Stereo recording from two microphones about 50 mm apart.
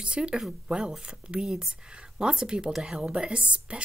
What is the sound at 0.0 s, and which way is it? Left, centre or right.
Speech, centre.